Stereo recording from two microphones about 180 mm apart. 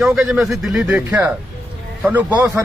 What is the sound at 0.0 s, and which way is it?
Speech, 5° right (ahead or behind).